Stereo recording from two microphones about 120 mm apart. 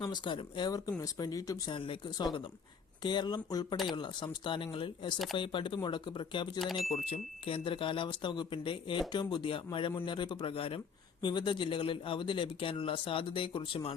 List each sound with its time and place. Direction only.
0.0 s speech: 40° left (ahead or behind)
1.7 s speech: 45° left (ahead or behind)
6.6 s speech: centre (ahead or behind)
6.9 s speech: 60° left (ahead or behind)
11.2 s speech: 40° left (ahead or behind)